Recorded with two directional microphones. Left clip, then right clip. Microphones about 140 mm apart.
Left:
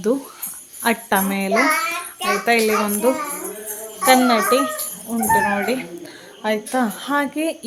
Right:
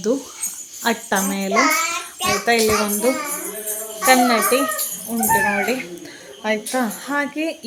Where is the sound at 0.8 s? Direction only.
5° left (ahead or behind).